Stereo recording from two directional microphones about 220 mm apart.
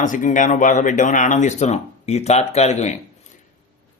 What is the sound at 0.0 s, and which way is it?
A man's voice, 35° left (ahead or behind).